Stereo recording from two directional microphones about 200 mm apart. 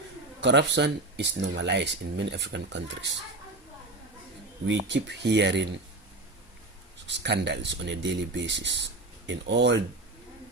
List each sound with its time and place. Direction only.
0.4 s speech: 60° right (ahead or behind)
4.6 s speech: 60° right (ahead or behind)
7.1 s speech: 60° right (ahead or behind)